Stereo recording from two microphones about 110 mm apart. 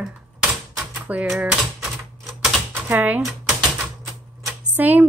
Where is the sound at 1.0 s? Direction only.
5° right (ahead or behind).